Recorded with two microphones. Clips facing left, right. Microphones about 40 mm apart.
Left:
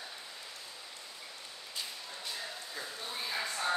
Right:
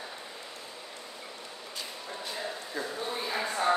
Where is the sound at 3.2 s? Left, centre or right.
Right.